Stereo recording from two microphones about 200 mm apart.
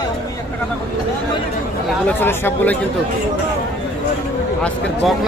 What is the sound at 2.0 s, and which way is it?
Speech, 10° left (ahead or behind).